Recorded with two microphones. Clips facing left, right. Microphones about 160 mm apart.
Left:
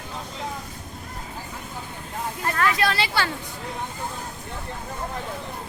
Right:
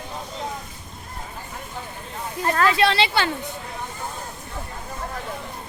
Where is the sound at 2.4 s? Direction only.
30° right (ahead or behind).